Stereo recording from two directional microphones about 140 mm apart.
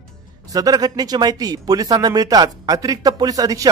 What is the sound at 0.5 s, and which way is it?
Speech, 25° right (ahead or behind).